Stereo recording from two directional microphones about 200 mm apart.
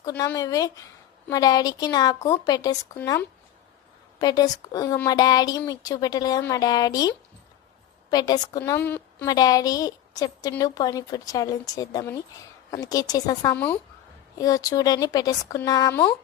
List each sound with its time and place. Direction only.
0.0 s a woman's voice: 15° left (ahead or behind)